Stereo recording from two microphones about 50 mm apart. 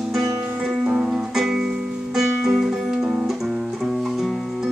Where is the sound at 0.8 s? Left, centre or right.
Right.